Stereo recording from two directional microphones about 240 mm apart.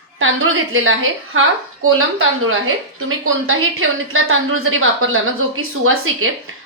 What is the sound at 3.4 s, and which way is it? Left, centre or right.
Speech, right.